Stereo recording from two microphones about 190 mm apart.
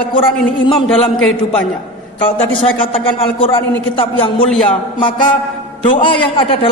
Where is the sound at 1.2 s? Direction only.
5° left (ahead or behind).